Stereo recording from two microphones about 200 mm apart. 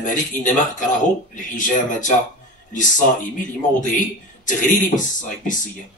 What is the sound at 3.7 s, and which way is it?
Speech, 40° left (ahead or behind).